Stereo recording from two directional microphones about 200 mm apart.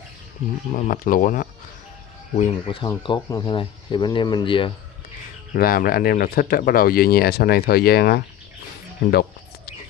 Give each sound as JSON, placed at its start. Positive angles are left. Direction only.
{"t": 0.7, "sound": "speech", "side_deg": 40}
{"t": 2.3, "sound": "speech", "side_deg": 30}
{"t": 5.5, "sound": "speech", "side_deg": 45}